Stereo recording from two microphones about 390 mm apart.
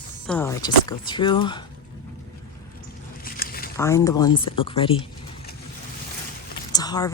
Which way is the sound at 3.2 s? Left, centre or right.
Left.